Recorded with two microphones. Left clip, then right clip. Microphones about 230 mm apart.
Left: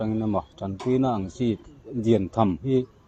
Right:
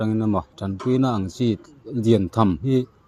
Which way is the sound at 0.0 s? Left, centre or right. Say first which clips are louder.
Right 3 dB; right.